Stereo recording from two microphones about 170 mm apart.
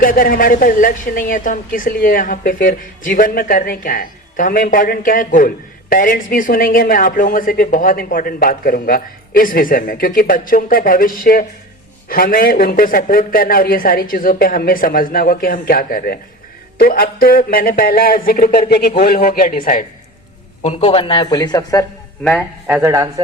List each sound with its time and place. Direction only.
0.0 s a woman's voice: 55° left (ahead or behind)
20.6 s speech: 35° left (ahead or behind)
22.2 s speech: 5° left (ahead or behind)
22.6 s speech: 15° right (ahead or behind)